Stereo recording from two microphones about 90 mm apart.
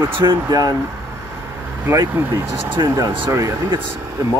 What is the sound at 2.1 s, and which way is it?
Speech, 25° right (ahead or behind).